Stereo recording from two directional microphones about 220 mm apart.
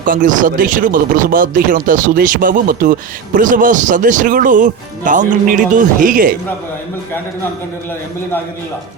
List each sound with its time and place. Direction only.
0.0 s speech: 35° right (ahead or behind)